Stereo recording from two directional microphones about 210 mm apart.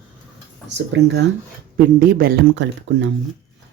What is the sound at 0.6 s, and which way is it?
Speech, 55° right (ahead or behind).